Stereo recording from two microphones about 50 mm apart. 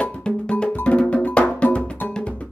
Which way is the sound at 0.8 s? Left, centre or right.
Left.